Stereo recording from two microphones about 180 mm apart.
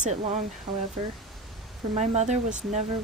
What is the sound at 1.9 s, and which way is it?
Speech, 40° right (ahead or behind).